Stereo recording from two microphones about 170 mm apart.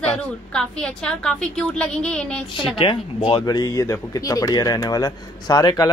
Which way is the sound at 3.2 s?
25° left (ahead or behind).